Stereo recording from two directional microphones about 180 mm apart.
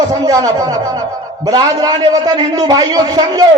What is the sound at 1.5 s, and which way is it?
A man's voice, 20° right (ahead or behind).